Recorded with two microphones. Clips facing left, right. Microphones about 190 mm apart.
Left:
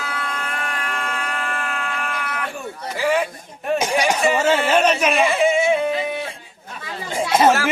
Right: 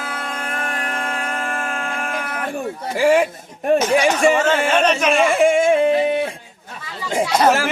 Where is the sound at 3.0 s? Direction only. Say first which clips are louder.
Right 5 dB; 45° right (ahead or behind).